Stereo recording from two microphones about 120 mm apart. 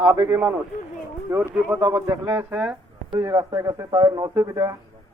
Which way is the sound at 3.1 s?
25° right (ahead or behind).